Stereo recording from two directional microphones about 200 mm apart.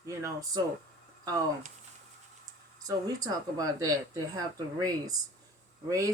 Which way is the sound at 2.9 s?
20° right (ahead or behind).